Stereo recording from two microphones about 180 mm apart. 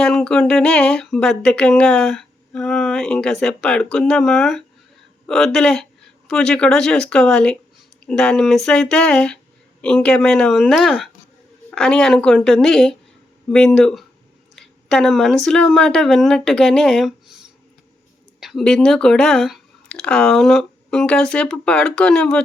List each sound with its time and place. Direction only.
0.0 s speech: centre (ahead or behind)